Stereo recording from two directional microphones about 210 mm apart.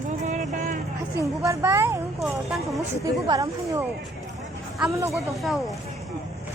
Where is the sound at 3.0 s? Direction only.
15° right (ahead or behind).